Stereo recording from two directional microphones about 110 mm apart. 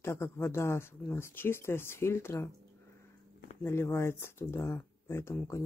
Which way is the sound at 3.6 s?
25° left (ahead or behind).